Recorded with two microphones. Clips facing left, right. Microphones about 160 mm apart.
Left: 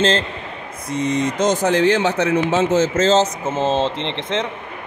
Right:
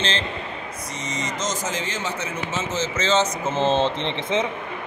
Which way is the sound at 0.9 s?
60° left (ahead or behind).